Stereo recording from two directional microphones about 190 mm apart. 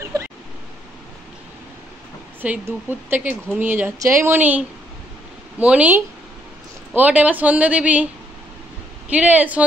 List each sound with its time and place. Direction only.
0.0 s a sound: 15° right (ahead or behind)
2.4 s a woman's voice: 10° right (ahead or behind)
9.1 s a woman's voice: 10° right (ahead or behind)